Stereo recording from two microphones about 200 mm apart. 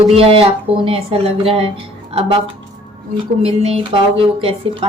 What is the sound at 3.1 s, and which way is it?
Speech, 30° right (ahead or behind).